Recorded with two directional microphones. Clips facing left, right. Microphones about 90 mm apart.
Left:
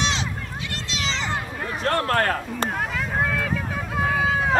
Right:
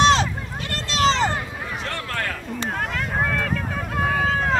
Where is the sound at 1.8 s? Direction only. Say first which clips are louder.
Left 9 dB; 45° left (ahead or behind).